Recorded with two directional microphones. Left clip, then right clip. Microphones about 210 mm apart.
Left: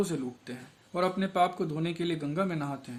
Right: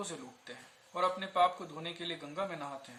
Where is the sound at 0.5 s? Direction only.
50° left (ahead or behind).